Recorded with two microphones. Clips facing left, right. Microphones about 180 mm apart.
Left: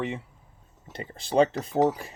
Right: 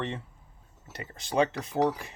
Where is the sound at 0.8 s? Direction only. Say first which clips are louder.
Left 4 dB; 30° left (ahead or behind).